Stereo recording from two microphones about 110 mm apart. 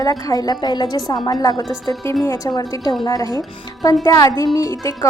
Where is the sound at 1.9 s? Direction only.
30° left (ahead or behind).